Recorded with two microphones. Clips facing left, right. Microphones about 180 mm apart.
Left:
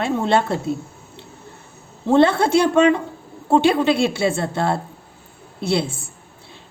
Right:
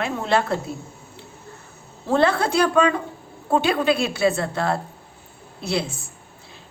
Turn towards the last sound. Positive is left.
turn(degrees=30)  # may be behind; listen again after turning